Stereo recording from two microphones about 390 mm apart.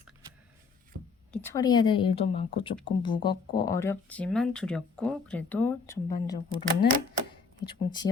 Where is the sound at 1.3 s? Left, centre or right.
Centre.